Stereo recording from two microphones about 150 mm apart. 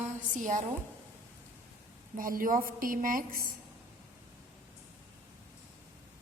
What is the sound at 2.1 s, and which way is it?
A woman's voice, 65° right (ahead or behind).